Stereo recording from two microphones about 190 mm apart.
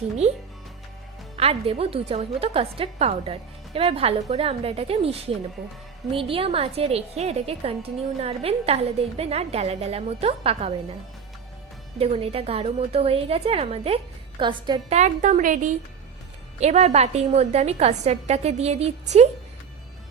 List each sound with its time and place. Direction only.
0.2 s a woman's voice: 35° right (ahead or behind)
11.9 s a woman's voice: 30° right (ahead or behind)
14.9 s a woman's voice: 40° right (ahead or behind)